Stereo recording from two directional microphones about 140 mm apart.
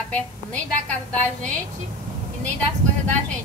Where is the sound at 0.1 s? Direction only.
10° left (ahead or behind).